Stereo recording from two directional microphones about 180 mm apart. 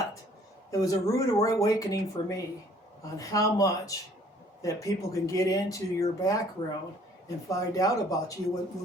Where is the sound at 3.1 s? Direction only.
20° left (ahead or behind).